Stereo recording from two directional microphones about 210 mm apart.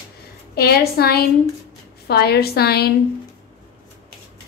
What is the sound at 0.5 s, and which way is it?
A woman's voice, 50° left (ahead or behind).